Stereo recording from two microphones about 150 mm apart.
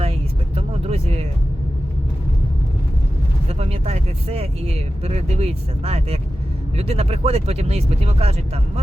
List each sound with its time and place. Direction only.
0.0 s vehicle: 40° right (ahead or behind)
3.6 s speech: 45° right (ahead or behind)